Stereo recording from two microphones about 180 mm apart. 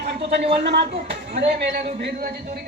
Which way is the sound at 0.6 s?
70° right (ahead or behind).